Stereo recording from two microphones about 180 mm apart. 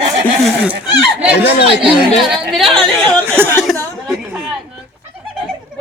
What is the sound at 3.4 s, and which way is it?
Chuckle, centre (ahead or behind).